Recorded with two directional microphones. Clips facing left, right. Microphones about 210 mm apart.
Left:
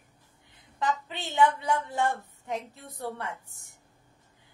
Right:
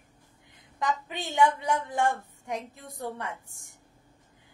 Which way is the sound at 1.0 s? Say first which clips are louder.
Even; 15° right (ahead or behind).